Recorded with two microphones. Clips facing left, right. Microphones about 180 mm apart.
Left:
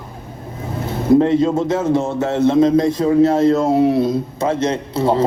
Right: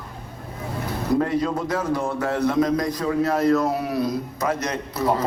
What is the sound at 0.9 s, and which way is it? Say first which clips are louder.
A man's voice: left 9 dB; 25° left (ahead or behind).